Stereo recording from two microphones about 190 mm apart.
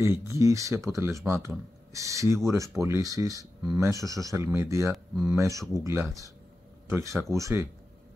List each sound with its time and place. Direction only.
0.0 s speech: 15° right (ahead or behind)